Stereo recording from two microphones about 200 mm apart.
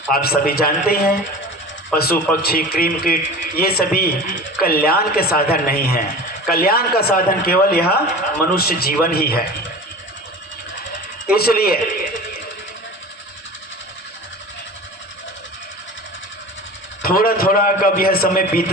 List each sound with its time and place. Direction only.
0.1 s speech: 50° left (ahead or behind)
11.3 s a sound: 50° left (ahead or behind)
17.0 s speech: 50° left (ahead or behind)